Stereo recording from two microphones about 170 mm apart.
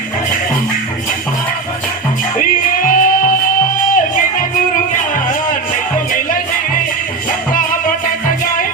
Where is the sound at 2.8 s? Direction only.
55° left (ahead or behind).